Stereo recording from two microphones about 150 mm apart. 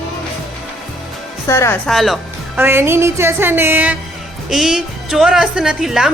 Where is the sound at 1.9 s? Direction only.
Centre (ahead or behind).